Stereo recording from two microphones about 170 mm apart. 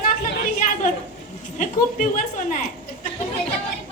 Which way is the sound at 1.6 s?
50° left (ahead or behind).